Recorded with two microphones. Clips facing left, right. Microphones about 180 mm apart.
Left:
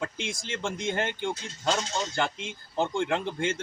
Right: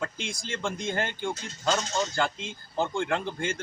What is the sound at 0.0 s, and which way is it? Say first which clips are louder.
Speech: even; 20° left (ahead or behind).